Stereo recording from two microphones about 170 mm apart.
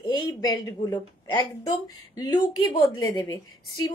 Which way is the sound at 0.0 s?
25° left (ahead or behind).